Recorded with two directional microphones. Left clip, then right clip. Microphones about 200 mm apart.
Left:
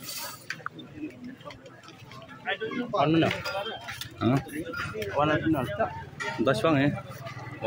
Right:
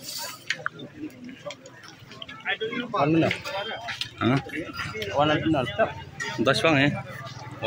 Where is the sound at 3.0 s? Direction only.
30° right (ahead or behind).